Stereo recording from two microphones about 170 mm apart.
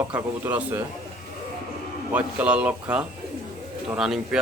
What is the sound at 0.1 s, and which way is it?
Speech, 10° right (ahead or behind).